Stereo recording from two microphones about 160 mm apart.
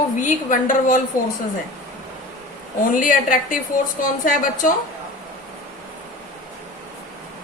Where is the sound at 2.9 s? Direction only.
55° left (ahead or behind).